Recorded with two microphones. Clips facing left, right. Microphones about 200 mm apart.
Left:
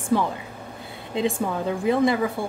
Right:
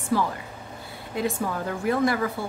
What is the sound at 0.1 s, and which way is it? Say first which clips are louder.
Speech: left 2 dB; 20° left (ahead or behind).